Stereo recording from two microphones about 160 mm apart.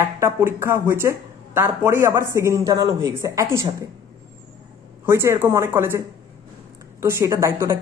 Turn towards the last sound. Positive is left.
turn(degrees=-20)  # may be behind; listen again after turning